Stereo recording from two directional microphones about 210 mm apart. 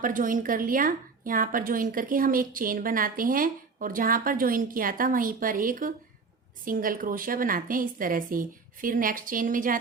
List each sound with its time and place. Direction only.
0.0 s a woman's voice: 40° right (ahead or behind)